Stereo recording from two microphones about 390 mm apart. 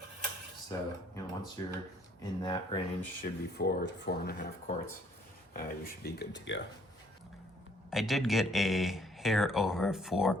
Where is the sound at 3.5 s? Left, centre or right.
Left.